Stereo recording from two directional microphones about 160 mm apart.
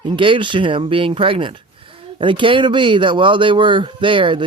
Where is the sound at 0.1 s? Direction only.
30° right (ahead or behind).